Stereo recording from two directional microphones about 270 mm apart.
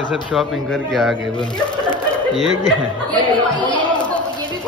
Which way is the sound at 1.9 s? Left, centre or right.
Centre.